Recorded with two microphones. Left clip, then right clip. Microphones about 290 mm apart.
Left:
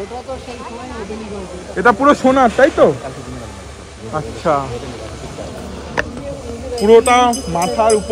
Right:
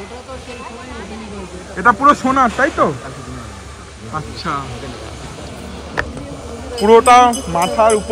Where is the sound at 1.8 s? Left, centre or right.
Left.